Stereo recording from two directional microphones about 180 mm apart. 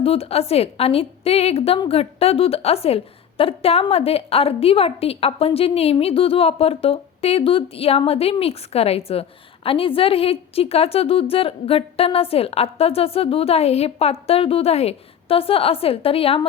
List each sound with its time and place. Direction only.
0.0 s a woman's voice: 30° left (ahead or behind)